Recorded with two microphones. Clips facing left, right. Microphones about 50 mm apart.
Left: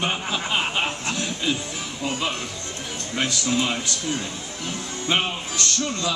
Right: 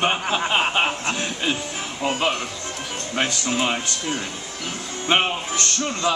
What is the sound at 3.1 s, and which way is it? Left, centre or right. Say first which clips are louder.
A man's voice: even; right.